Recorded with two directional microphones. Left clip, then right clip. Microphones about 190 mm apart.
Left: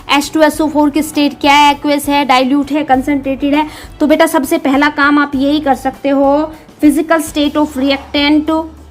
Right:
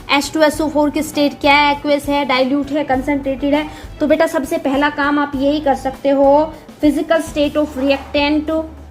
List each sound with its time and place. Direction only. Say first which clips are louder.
0.1 s a woman's voice: left 3 dB; 25° left (ahead or behind); by 8.5 s 45° left (ahead or behind)